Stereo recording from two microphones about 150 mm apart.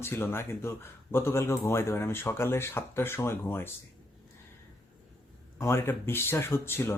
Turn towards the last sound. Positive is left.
turn(degrees=15)  # may be behind; listen again after turning